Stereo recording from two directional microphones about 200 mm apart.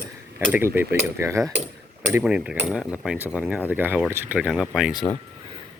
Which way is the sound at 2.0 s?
5° right (ahead or behind).